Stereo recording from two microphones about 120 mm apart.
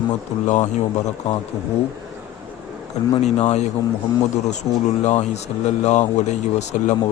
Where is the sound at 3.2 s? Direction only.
70° left (ahead or behind).